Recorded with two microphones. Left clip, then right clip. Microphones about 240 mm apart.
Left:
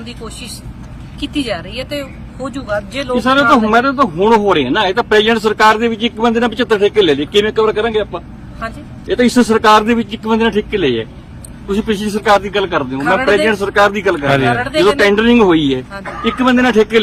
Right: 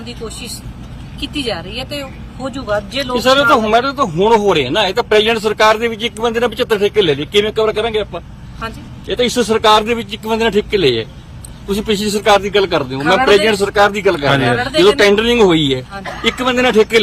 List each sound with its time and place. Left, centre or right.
1.2 s speech: centre
3.2 s a man's voice: right
14.3 s speech: centre
14.8 s a man's voice: right